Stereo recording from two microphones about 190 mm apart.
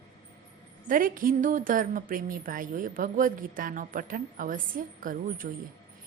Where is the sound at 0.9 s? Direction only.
45° right (ahead or behind).